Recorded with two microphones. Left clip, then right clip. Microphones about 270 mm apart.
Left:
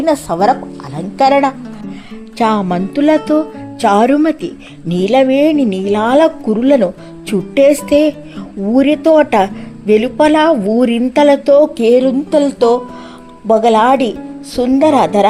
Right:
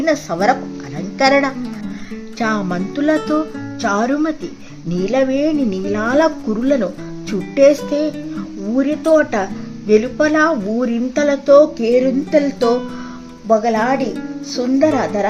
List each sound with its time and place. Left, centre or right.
0.0 s speech: centre